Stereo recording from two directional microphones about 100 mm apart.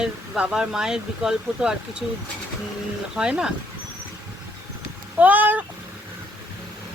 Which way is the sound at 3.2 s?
10° right (ahead or behind).